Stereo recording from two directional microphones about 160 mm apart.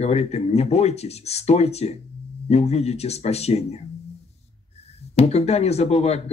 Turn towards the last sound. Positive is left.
turn(degrees=40)  # may be behind; listen again after turning